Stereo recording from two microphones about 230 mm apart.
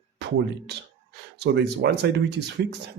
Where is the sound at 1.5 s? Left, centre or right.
Right.